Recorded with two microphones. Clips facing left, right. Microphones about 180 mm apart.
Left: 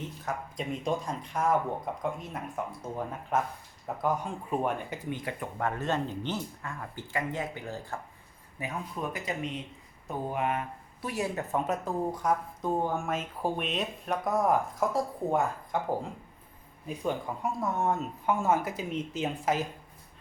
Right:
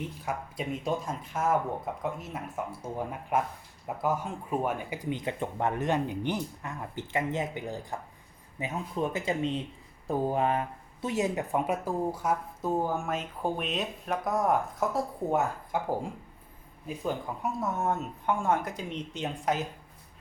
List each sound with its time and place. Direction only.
0.0 s speech: 5° right (ahead or behind)
5.0 s speech: 20° right (ahead or behind); by 15.8 s 5° right (ahead or behind)
16.8 s speech: centre (ahead or behind)